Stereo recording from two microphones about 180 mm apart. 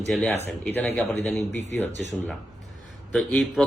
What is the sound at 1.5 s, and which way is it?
Speech, 40° right (ahead or behind).